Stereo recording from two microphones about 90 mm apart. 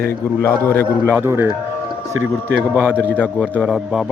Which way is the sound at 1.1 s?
25° right (ahead or behind).